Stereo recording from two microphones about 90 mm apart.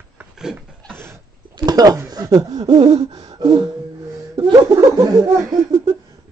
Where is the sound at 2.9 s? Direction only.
45° right (ahead or behind).